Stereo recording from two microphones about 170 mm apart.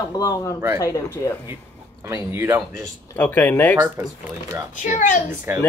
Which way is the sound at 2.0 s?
15° right (ahead or behind).